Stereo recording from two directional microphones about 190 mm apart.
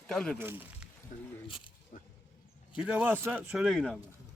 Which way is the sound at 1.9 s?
40° left (ahead or behind).